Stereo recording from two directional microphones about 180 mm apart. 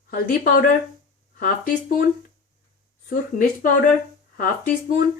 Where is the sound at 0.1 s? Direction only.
55° left (ahead or behind).